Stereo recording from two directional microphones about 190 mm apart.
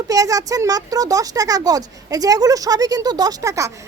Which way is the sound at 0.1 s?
20° right (ahead or behind).